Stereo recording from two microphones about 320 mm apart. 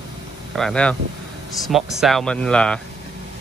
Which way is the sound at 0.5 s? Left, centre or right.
Centre.